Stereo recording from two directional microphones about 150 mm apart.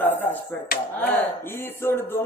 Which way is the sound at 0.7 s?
80° left.